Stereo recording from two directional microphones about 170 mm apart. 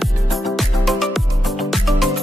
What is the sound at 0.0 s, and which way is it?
Music, centre (ahead or behind).